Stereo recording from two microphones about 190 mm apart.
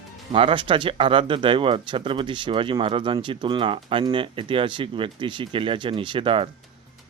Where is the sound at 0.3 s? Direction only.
25° right (ahead or behind).